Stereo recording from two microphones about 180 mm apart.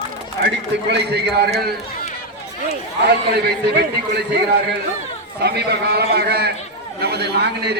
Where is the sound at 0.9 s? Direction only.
65° right (ahead or behind).